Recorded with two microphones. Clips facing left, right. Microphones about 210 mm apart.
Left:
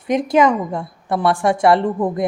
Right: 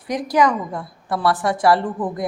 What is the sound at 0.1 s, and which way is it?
A woman's voice, 25° left (ahead or behind).